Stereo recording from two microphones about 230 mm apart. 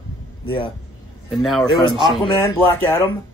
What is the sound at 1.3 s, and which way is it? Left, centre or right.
Speech, centre.